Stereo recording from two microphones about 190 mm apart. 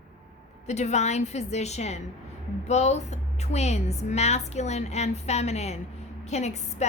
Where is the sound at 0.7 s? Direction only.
35° left (ahead or behind).